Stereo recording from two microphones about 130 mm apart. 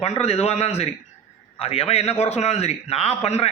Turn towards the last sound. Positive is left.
turn(degrees=55)  # may be behind; listen again after turning